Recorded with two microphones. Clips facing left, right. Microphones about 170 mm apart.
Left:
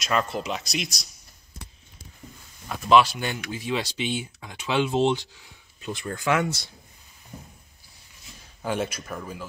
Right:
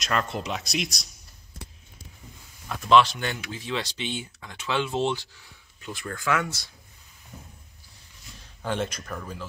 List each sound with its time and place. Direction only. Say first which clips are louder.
0.0 s speech: left 2 dB; centre (ahead or behind)
2.7 s speech: left 1 dB; centre (ahead or behind)
3.2 s speech: left 2 dB; 15° left (ahead or behind)
8.6 s speech: left 1 dB; 10° left (ahead or behind)